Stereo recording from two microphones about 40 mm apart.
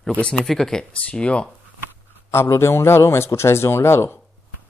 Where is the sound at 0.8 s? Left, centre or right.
Left.